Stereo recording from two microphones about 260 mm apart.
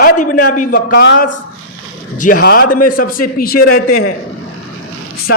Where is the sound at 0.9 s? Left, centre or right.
Left.